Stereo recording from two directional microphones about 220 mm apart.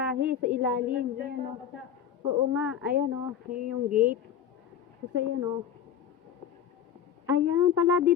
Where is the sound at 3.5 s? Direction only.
40° right (ahead or behind).